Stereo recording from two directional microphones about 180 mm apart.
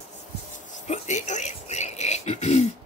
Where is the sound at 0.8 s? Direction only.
40° left (ahead or behind).